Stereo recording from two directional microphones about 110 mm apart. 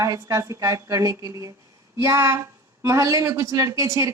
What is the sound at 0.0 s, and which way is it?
A woman's voice, 30° right (ahead or behind).